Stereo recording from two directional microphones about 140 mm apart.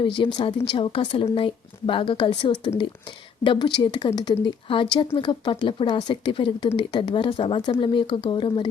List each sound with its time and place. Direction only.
0.0 s speech: 35° left (ahead or behind)